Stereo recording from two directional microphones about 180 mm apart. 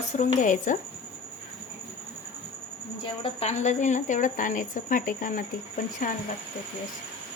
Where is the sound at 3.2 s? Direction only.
35° left (ahead or behind).